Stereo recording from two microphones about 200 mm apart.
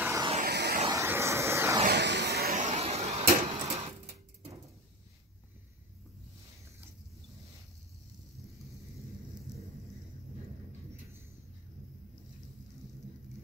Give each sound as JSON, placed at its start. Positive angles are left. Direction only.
{"t": 0.0, "sound": "vehicle", "side_deg": -15}
{"t": 0.5, "sound": "vehicle", "side_deg": -55}
{"t": 0.8, "sound": "vehicle", "side_deg": -15}
{"t": 1.9, "sound": "vehicle", "side_deg": -60}